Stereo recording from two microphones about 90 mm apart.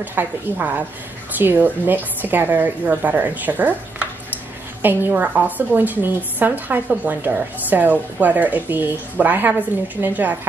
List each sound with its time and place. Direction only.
0.0 s a woman's voice: 20° right (ahead or behind)